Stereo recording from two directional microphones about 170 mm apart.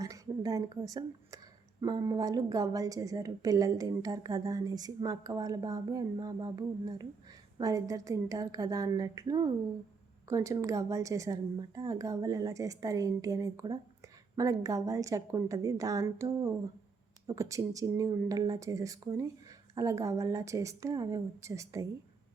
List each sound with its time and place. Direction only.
0.0 s a woman's voice: 20° right (ahead or behind)